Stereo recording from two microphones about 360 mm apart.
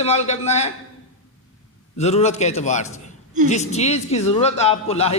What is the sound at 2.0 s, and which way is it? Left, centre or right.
A man's voice, centre.